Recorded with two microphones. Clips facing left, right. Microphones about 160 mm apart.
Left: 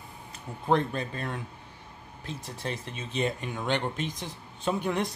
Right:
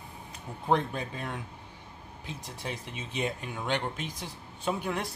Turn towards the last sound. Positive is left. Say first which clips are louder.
# left 3 dB
turn(degrees=-5)  # may be behind; listen again after turning